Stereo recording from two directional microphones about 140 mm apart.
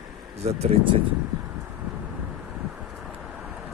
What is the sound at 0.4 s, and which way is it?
Speech, 45° right (ahead or behind).